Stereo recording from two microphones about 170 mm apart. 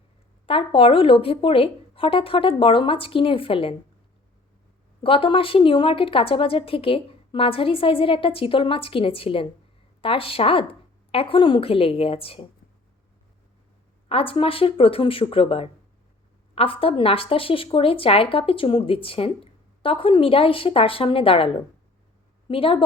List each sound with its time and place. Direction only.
0.4 s a woman's voice: 30° left (ahead or behind)
5.0 s a woman's voice: 30° left (ahead or behind)
14.1 s a woman's voice: 35° left (ahead or behind)